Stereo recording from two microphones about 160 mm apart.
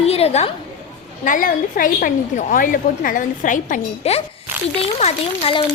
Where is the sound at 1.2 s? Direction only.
55° left (ahead or behind).